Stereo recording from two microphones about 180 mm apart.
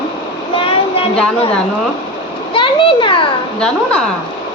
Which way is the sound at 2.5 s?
30° left (ahead or behind).